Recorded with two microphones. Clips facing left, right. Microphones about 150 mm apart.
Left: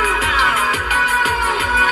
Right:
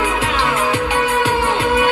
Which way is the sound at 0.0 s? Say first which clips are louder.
Right 2 dB; 30° right (ahead or behind).